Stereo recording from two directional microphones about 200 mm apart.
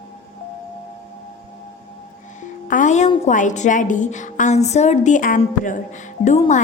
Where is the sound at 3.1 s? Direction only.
35° left (ahead or behind).